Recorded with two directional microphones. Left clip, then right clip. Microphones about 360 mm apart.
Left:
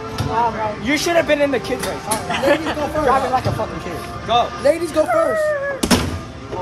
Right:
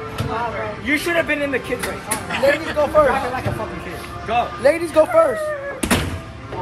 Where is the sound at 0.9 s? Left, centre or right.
Left.